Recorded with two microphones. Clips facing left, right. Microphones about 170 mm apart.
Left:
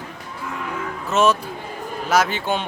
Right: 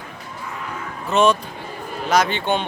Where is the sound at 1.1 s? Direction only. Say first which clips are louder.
Right 1 dB; 5° left (ahead or behind).